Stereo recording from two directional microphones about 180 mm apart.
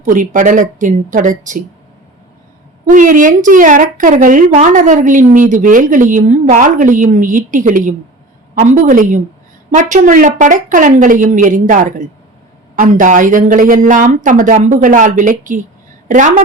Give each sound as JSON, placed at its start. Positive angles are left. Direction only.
{"t": 0.0, "sound": "a woman's voice", "side_deg": -45}
{"t": 2.9, "sound": "a woman's voice", "side_deg": -45}